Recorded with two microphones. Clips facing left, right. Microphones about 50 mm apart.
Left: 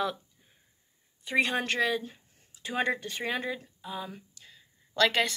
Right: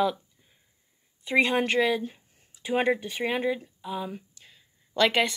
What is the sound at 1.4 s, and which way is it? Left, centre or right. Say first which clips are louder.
Speech: right 4 dB; right.